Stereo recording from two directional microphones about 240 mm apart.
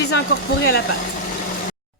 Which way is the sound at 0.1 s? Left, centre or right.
Left.